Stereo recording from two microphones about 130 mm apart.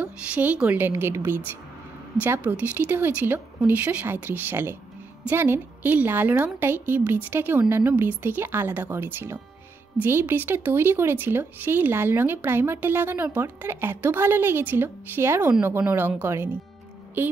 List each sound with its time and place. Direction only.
0.0 s speech: 10° right (ahead or behind)